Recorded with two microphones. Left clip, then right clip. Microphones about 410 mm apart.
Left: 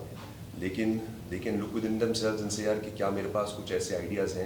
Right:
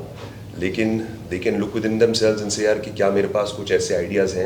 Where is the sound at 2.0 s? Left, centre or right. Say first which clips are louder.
Right 13 dB; right.